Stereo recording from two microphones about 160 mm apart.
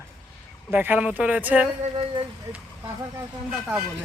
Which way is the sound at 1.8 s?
35° right (ahead or behind).